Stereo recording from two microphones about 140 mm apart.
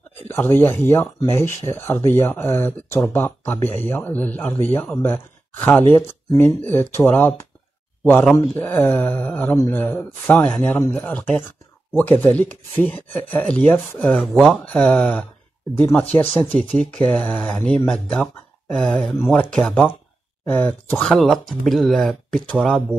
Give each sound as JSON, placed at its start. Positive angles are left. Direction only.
{"t": 0.3, "sound": "speech", "side_deg": 15}